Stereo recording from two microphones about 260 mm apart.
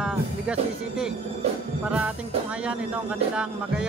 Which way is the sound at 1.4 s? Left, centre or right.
Right.